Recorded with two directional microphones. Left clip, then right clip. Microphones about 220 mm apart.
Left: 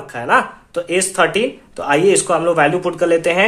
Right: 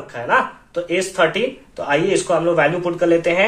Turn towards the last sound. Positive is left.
turn(degrees=50)  # may be behind; listen again after turning